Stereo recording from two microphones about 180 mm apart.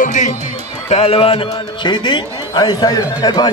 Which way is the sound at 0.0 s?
45° left (ahead or behind).